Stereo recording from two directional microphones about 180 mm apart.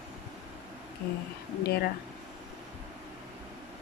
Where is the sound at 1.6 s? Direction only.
60° left (ahead or behind).